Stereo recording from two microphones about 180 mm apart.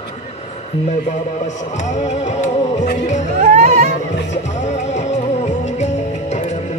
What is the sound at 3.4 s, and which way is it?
Music, 40° right (ahead or behind).